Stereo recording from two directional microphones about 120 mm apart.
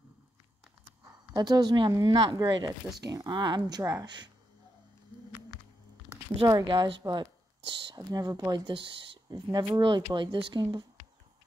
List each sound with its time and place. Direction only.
1.3 s speech: 30° right (ahead or behind)
4.0 s speech: 40° right (ahead or behind)
6.4 s a woman's voice: 35° right (ahead or behind)